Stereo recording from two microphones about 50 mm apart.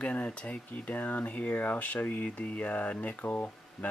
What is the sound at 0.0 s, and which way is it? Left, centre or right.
Speech, left.